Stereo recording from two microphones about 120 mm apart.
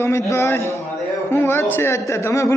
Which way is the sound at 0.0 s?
25° left (ahead or behind).